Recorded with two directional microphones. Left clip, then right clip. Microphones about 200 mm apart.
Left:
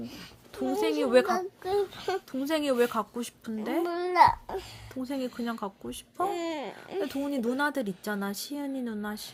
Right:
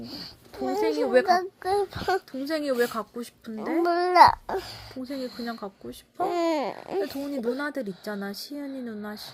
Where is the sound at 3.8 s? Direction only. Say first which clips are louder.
Right 5 dB; 45° right (ahead or behind).